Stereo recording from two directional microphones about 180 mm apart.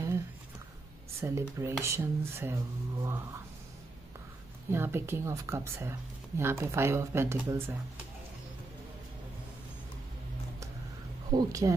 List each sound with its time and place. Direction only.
1.2 s speech: 15° right (ahead or behind)
4.6 s speech: 15° right (ahead or behind)
11.3 s speech: 20° right (ahead or behind)